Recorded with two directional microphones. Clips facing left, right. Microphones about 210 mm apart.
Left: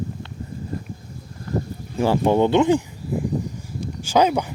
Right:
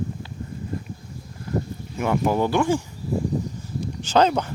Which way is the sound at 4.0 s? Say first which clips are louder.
Left 1 dB; 10° left (ahead or behind).